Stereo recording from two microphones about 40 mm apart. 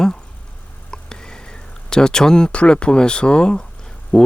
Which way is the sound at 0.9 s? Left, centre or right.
Centre.